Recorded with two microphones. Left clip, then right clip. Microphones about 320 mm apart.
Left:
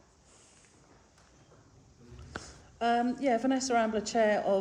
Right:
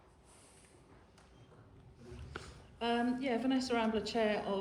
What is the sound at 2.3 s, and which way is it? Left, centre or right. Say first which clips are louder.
A woman's voice: left 6 dB; left.